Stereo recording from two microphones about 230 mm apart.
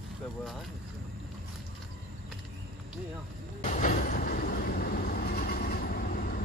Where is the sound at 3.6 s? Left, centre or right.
Left.